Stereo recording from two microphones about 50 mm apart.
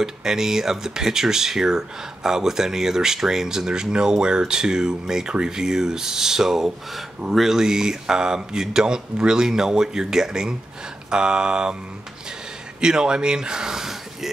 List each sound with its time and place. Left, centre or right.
0.0 s speech: centre
12.8 s speech: centre